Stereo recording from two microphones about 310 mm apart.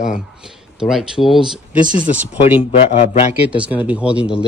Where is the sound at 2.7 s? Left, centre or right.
Centre.